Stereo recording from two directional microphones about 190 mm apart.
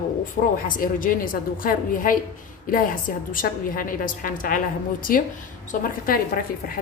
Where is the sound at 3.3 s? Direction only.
45° left (ahead or behind).